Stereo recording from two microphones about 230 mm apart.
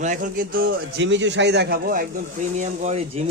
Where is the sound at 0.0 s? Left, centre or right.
Right.